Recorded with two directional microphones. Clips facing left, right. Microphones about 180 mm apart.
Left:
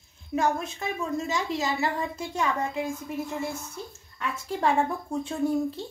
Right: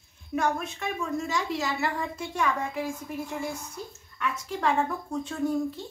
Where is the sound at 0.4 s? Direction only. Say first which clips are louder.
Left 1 dB; 25° left (ahead or behind).